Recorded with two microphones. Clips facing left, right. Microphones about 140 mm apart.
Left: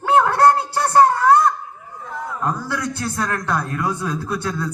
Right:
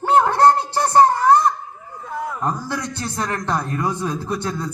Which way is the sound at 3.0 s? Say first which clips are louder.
Left 1 dB; 20° right (ahead or behind).